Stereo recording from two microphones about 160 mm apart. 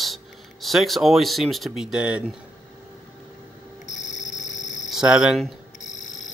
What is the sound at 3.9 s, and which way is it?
Music, 50° left (ahead or behind).